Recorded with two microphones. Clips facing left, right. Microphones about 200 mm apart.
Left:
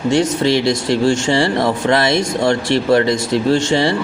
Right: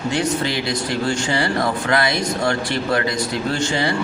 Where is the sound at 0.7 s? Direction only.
25° left (ahead or behind).